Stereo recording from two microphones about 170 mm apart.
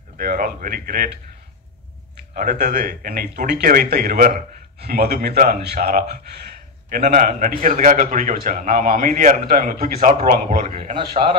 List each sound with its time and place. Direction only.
0.2 s speech: 55° right (ahead or behind)
2.3 s speech: 65° right (ahead or behind)
2.9 s speech: 55° right (ahead or behind)
4.7 s speech: 70° right (ahead or behind)
7.0 s a man's voice: 50° right (ahead or behind)